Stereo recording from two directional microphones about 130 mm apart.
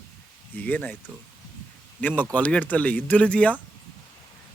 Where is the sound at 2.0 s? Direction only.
15° left (ahead or behind).